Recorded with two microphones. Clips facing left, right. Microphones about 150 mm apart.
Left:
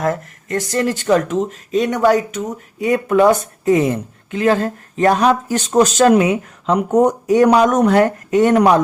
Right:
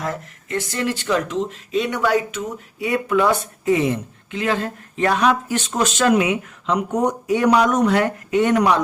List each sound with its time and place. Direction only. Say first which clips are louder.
0.0 s speech: left 7 dB; 45° left (ahead or behind)